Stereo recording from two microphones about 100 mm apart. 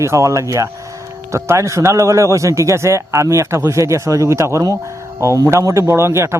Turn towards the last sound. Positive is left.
turn(degrees=-25)  # may be behind; listen again after turning